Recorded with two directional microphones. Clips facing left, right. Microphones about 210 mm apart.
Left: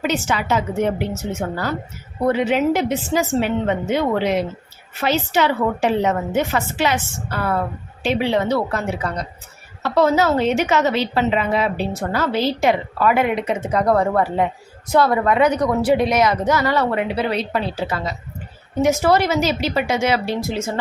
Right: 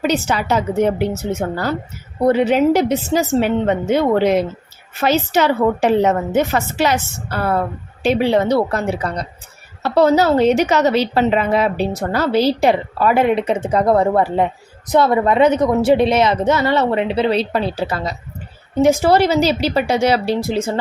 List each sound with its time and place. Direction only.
0.1 s a woman's voice: 35° right (ahead or behind)